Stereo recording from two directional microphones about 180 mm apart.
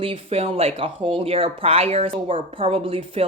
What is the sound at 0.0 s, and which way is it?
Speech, 30° right (ahead or behind).